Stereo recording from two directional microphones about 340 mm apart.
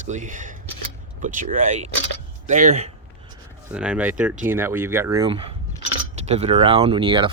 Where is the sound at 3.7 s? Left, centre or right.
Centre.